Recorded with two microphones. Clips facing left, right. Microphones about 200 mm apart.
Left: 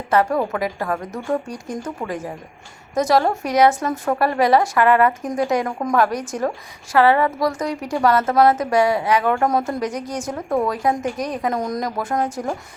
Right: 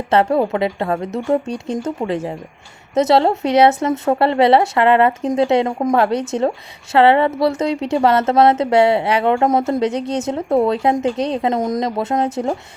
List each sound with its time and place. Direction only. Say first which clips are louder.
0.1 s a woman's voice: right 3 dB; 30° right (ahead or behind)